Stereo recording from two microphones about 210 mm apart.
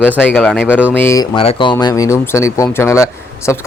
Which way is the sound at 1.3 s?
25° left (ahead or behind).